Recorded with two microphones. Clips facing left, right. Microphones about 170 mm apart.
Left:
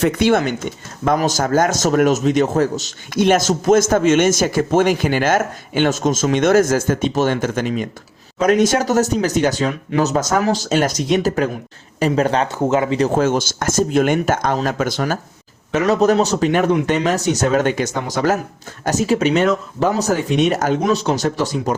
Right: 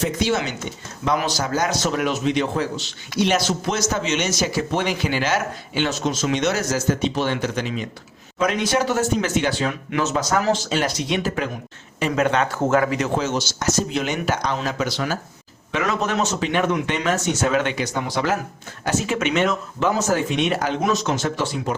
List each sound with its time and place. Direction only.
0.0 s a man's voice: 60° left (ahead or behind); by 12.5 s 30° left (ahead or behind)
12.6 s speech: 20° left (ahead or behind)
13.1 s a man's voice: 50° left (ahead or behind)